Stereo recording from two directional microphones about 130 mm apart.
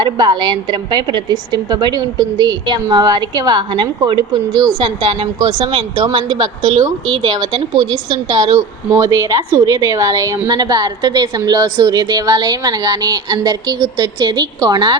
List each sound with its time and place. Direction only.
0.0 s a woman's voice: 35° right (ahead or behind)